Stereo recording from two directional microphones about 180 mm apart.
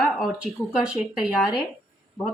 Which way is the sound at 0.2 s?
5° right (ahead or behind).